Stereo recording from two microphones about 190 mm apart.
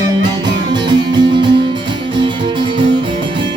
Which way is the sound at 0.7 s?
25° right (ahead or behind).